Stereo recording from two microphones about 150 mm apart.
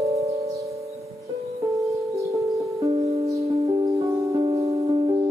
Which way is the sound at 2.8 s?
20° right (ahead or behind).